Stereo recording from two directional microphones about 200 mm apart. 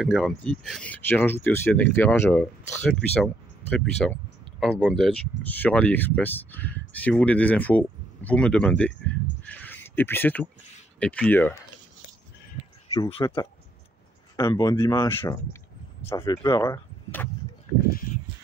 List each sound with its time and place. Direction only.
0.0 s speech: centre (ahead or behind)
9.4 s a sound: 10° left (ahead or behind)
11.0 s speech: 5° left (ahead or behind)
12.9 s speech: 20° left (ahead or behind)